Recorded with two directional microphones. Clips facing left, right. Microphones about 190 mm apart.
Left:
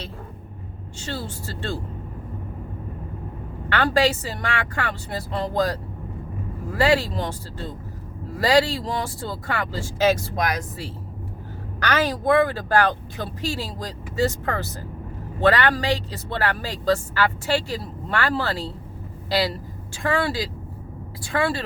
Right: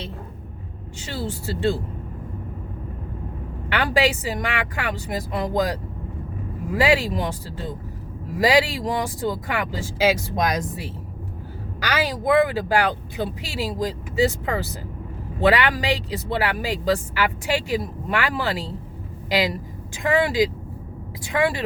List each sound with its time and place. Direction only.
1.0 s speech: 15° right (ahead or behind)
3.7 s speech: 15° right (ahead or behind)